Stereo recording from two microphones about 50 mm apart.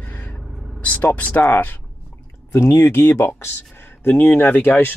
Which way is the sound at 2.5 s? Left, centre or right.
Left.